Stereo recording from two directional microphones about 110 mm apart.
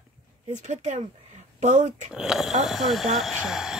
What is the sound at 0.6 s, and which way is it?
Speech, 90° right.